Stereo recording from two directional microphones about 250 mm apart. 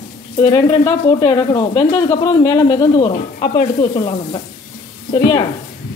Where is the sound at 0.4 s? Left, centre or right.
Centre.